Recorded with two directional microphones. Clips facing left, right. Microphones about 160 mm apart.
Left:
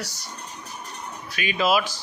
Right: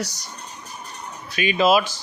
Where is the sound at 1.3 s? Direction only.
25° right (ahead or behind).